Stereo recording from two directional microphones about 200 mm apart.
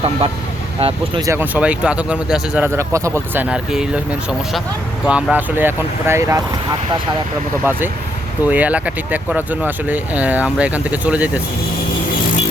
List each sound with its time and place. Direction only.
0.8 s speech: 30° right (ahead or behind)
1.2 s speech: 10° right (ahead or behind)
7.6 s speech: 10° right (ahead or behind)